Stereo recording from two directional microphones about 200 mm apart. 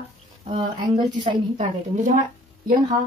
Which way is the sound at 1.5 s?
40° right (ahead or behind).